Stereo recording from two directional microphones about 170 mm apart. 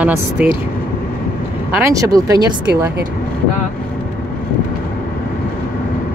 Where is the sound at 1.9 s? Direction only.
20° right (ahead or behind).